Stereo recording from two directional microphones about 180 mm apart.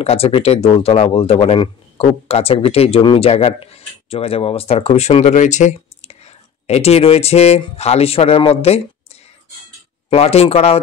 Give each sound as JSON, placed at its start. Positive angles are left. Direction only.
{"t": 0.0, "sound": "speech", "side_deg": 35}
{"t": 10.0, "sound": "speech", "side_deg": 35}